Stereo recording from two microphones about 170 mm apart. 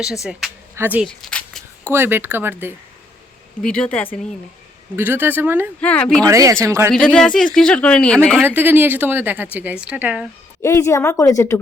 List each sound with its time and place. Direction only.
0.3 s a woman's voice: centre (ahead or behind)
1.0 s a sound: 5° left (ahead or behind)
1.9 s a woman's voice: 15° right (ahead or behind)
3.6 s a woman's voice: 5° left (ahead or behind)
4.9 s a woman's voice: 10° right (ahead or behind)
5.8 s a woman's voice: 5° left (ahead or behind)
6.2 s a woman's voice: 20° right (ahead or behind)
6.9 s speech: 5° left (ahead or behind)
8.4 s a woman's voice: 10° right (ahead or behind)
10.6 s a woman's voice: 15° left (ahead or behind)